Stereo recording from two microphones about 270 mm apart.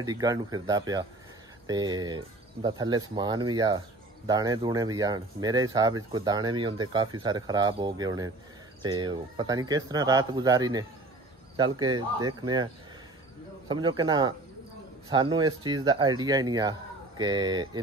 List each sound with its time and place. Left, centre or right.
0.0 s speech: centre
13.7 s speech: centre